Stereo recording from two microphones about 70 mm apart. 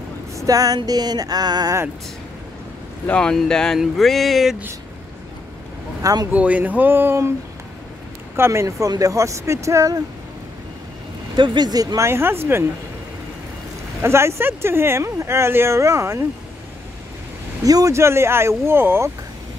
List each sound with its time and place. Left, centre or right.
0.4 s vehicle: right
3.1 s speech: centre
3.8 s a sound: centre
6.3 s a sound: right
8.4 s speech: right
11.4 s vehicle: right
12.0 s speech: right
14.0 s speech: right
17.6 s speech: right
17.9 s speech: right